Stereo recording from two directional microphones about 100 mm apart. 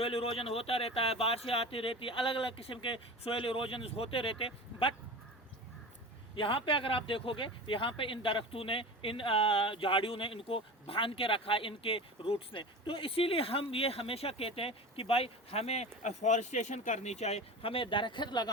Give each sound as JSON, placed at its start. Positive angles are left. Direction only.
{"t": 0.0, "sound": "speech", "side_deg": 70}
{"t": 6.3, "sound": "speech", "side_deg": 60}
{"t": 17.2, "sound": "speech", "side_deg": 90}